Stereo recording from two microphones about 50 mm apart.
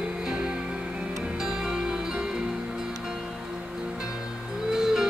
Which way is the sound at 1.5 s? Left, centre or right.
Centre.